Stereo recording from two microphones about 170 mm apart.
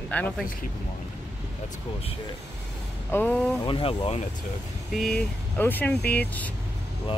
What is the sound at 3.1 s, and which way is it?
Speech, 10° left (ahead or behind).